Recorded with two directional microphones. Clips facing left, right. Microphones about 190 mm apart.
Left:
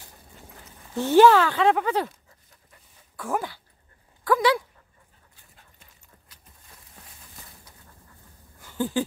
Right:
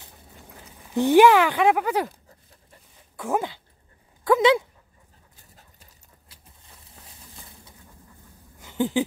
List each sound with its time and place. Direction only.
0.9 s speech: 15° right (ahead or behind)
3.2 s speech: 20° right (ahead or behind)
5.3 s dog: 40° right (ahead or behind)
8.5 s a sound: 20° right (ahead or behind)